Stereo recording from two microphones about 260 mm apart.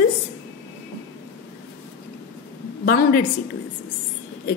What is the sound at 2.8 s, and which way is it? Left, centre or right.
Speech, left.